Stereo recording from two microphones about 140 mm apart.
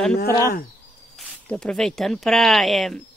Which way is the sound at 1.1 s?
5° left (ahead or behind).